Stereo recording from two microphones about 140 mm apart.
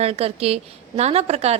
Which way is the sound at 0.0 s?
45° right (ahead or behind).